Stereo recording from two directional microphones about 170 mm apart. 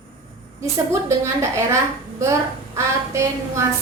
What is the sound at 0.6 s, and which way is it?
A woman's voice, 15° right (ahead or behind).